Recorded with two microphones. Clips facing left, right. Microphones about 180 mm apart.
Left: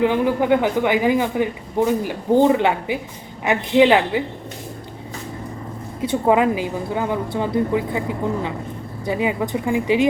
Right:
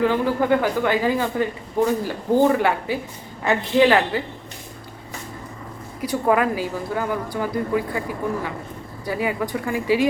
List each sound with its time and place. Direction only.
0.0 s speech: 15° left (ahead or behind)
6.0 s a woman's voice: 25° left (ahead or behind)